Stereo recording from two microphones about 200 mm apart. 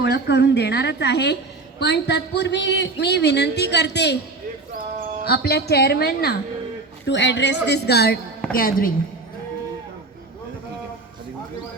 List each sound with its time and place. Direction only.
0.0 s a man's voice: 60° left (ahead or behind)
5.2 s speech: 50° left (ahead or behind)
7.0 s a man's voice: 60° left (ahead or behind); by 8.9 s 45° left (ahead or behind)